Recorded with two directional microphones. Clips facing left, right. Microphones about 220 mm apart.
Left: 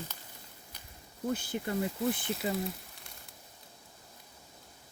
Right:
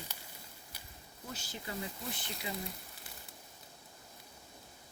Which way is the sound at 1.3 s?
55° left (ahead or behind).